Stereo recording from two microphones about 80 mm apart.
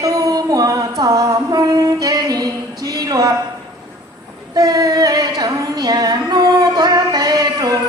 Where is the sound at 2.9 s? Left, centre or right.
Right.